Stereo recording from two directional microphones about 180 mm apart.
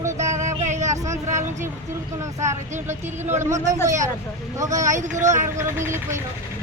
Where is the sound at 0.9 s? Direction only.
15° right (ahead or behind).